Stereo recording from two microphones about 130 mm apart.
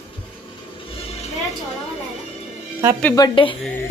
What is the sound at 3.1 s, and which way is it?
Speech, 35° left (ahead or behind).